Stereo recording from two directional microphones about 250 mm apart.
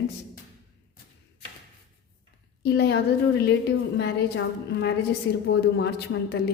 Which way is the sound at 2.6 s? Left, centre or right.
Left.